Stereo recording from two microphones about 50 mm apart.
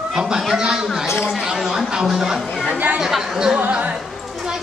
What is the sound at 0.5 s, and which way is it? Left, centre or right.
A woman's voice, centre.